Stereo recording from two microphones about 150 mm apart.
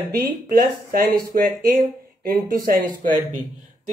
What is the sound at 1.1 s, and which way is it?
Speech, 80° right.